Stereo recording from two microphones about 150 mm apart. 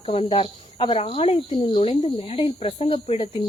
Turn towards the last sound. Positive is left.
turn(degrees=40)  # may be behind; listen again after turning